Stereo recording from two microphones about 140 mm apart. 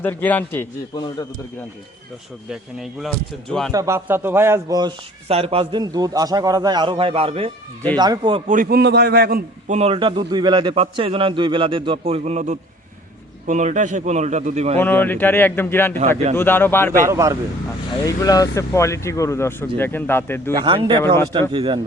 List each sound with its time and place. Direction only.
0.0 s a man's voice: 15° left (ahead or behind)
0.9 s a man's voice: 30° left (ahead or behind)
2.5 s speech: centre (ahead or behind)
3.7 s speech: 20° right (ahead or behind)
5.3 s a man's voice: 45° right (ahead or behind)
5.8 s speech: 30° right (ahead or behind); by 7.5 s 45° right (ahead or behind)
7.9 s speech: 30° right (ahead or behind)
8.4 s a man's voice: 80° right
9.7 s a man's voice: 40° right (ahead or behind)
14.8 s a man's voice: 15° left (ahead or behind)
17.0 s speech: 20° right (ahead or behind)
18.0 s speech: 25° left (ahead or behind)
20.5 s a man's voice: 30° right (ahead or behind)